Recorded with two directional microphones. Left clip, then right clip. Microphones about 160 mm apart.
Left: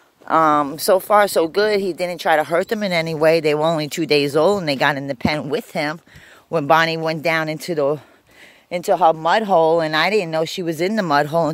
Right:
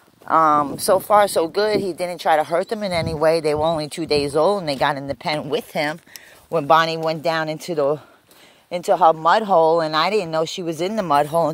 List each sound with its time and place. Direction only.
0.2 s speech: 40° left (ahead or behind)